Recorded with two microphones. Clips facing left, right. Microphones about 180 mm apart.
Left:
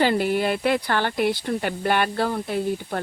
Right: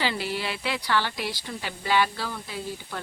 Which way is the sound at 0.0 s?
50° left (ahead or behind).